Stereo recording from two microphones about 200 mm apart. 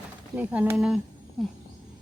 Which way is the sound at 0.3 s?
10° right (ahead or behind).